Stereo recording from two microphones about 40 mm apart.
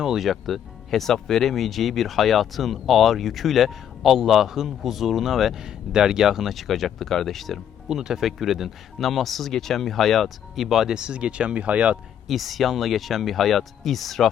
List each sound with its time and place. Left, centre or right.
0.0 s speech: centre
0.3 s speech: centre
5.6 s speech: centre
7.9 s speech: centre
10.9 s speech: right
12.3 s speech: centre